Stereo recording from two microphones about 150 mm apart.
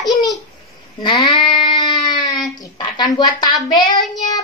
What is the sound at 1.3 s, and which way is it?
Music, 30° left (ahead or behind).